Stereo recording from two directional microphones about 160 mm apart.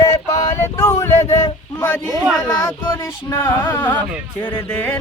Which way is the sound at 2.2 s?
Centre (ahead or behind).